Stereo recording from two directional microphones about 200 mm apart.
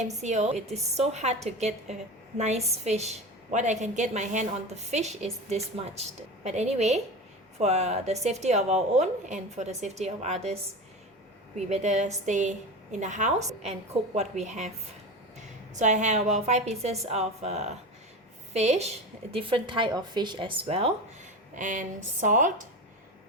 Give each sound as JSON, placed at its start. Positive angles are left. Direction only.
{"t": 0.0, "sound": "a woman's voice", "side_deg": -35}
{"t": 15.7, "sound": "a woman's voice", "side_deg": -35}